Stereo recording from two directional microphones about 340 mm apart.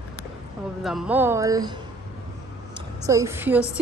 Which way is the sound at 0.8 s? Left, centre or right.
Centre.